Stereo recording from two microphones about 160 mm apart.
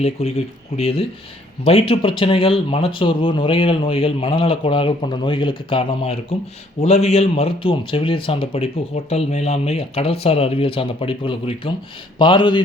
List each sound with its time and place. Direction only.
0.0 s a man's voice: 40° left (ahead or behind)